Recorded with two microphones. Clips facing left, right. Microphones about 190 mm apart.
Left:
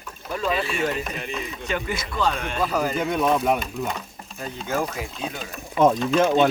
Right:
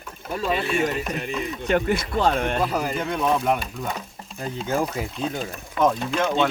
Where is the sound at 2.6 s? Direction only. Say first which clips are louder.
Left 1 dB; 10° right (ahead or behind).